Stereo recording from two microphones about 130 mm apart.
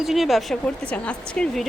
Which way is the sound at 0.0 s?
Centre (ahead or behind).